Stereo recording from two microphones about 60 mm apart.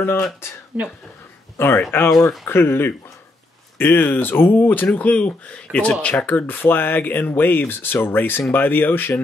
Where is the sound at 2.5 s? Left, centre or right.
Left.